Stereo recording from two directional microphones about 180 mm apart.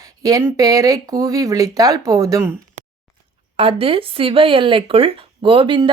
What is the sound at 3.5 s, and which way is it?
Speech, 30° right (ahead or behind).